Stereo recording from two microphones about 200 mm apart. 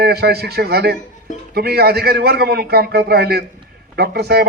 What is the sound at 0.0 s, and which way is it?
A man's voice, 50° right (ahead or behind).